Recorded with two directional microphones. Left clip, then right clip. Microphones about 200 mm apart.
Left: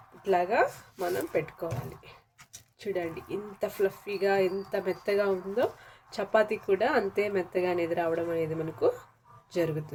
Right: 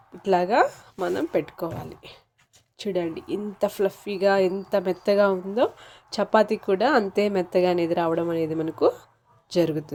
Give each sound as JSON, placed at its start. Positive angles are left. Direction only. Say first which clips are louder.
{"t": 0.2, "sound": "speech", "louder": "right 5 dB", "side_deg": -35}